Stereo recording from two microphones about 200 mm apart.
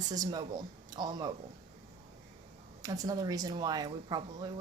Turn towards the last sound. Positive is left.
turn(degrees=-20)  # may be behind; listen again after turning